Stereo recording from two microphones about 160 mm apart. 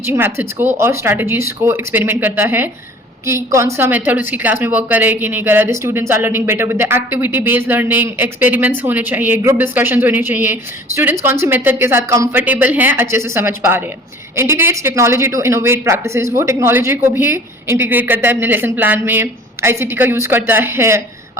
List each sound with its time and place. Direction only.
0.0 s a woman's voice: 15° right (ahead or behind)